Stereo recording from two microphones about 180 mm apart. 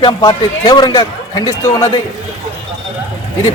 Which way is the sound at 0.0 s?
25° left (ahead or behind).